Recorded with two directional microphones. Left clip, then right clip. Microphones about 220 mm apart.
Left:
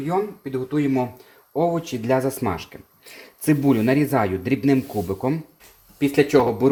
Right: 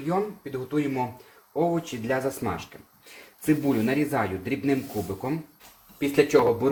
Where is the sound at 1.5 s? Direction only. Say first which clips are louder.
Left 4 dB; 45° left (ahead or behind).